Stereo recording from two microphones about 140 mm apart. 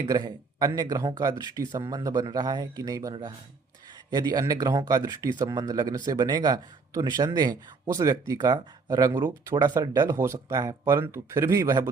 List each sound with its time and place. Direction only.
0.1 s a man's voice: 30° right (ahead or behind)